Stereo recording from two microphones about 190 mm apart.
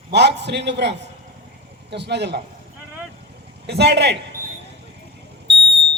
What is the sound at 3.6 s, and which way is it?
Speech, 65° right (ahead or behind).